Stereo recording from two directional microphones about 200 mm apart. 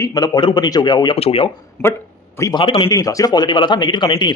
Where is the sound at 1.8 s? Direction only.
5° left (ahead or behind).